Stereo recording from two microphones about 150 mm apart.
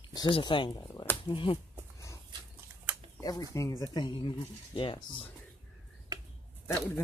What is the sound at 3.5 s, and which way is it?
Speech, 20° left (ahead or behind).